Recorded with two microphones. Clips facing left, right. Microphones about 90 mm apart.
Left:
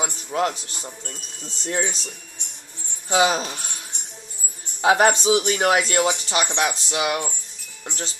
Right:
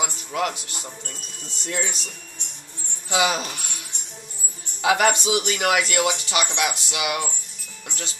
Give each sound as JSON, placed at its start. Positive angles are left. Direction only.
{"t": 0.0, "sound": "a man's voice", "side_deg": 30}
{"t": 0.8, "sound": "speech", "side_deg": 5}
{"t": 1.7, "sound": "speech", "side_deg": 35}
{"t": 3.1, "sound": "speech", "side_deg": 35}
{"t": 4.8, "sound": "speech", "side_deg": 30}